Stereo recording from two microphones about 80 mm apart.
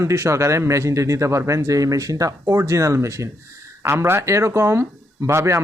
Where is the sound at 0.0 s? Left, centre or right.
Right.